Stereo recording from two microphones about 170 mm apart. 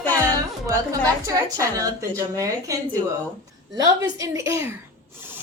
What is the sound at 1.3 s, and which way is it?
A woman's voice, 20° right (ahead or behind).